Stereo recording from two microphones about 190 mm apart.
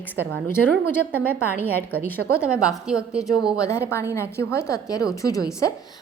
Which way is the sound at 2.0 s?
10° left (ahead or behind).